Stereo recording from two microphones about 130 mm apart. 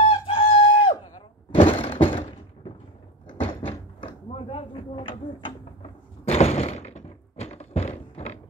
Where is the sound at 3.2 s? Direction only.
40° left (ahead or behind).